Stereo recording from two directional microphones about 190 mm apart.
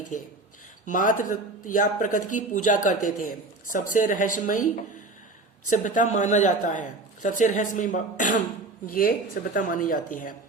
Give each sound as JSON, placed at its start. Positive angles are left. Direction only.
{"t": 0.1, "sound": "speech", "side_deg": 40}
{"t": 5.7, "sound": "speech", "side_deg": 40}